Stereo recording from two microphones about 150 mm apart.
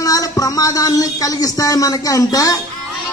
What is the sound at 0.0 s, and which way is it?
Speech, 25° left (ahead or behind).